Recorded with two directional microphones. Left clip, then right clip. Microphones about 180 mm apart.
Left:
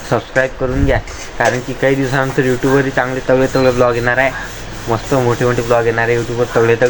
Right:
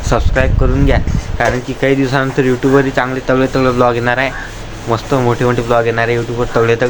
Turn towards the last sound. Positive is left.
turn(degrees=-15)  # may be behind; listen again after turning